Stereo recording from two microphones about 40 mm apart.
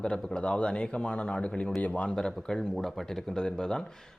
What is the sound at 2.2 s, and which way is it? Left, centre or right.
Speech, centre.